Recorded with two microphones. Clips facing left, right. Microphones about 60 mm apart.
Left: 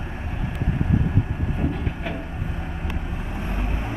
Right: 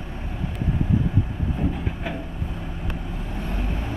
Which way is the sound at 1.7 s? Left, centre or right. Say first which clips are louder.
Even; centre.